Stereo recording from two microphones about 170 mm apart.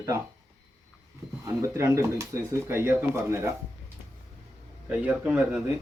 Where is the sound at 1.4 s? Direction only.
15° right (ahead or behind).